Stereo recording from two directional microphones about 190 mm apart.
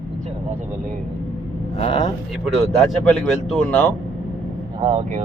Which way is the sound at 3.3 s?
Centre (ahead or behind).